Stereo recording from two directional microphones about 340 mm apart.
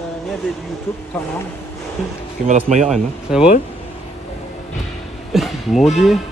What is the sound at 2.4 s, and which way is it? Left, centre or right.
Speech, right.